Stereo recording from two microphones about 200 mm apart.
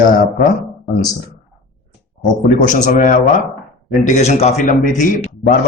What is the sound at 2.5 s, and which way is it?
A man's voice, 40° left (ahead or behind).